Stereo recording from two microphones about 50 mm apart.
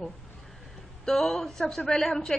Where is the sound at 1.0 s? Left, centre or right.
Centre.